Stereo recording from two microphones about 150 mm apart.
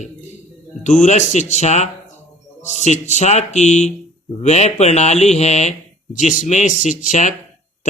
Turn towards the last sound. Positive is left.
turn(degrees=55)  # may be behind; listen again after turning